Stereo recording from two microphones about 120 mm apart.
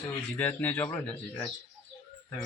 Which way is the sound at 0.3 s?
15° left (ahead or behind).